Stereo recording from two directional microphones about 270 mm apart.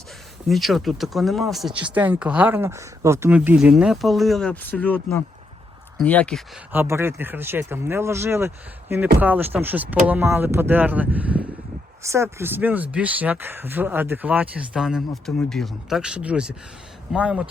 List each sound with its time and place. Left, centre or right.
0.4 s speech: centre
6.7 s speech: centre